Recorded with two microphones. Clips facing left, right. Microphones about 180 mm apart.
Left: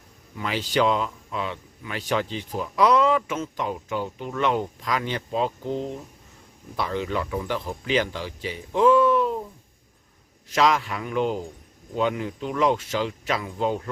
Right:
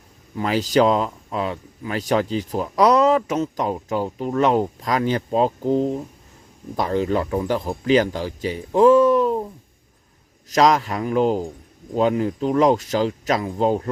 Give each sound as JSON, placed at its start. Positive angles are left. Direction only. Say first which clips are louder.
{"t": 0.3, "sound": "speech", "louder": "right 6 dB", "side_deg": -40}
{"t": 10.5, "sound": "speech", "louder": "right 5 dB", "side_deg": -40}